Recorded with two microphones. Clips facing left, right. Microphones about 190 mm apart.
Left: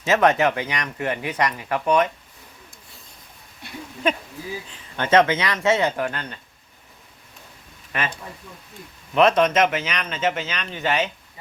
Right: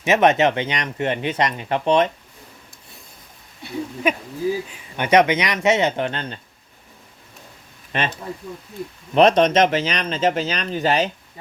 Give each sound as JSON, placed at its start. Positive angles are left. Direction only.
{"t": 0.0, "sound": "speech", "side_deg": -20}
{"t": 4.0, "sound": "speech", "side_deg": -10}
{"t": 7.9, "sound": "speech", "side_deg": -30}
{"t": 9.1, "sound": "speech", "side_deg": -35}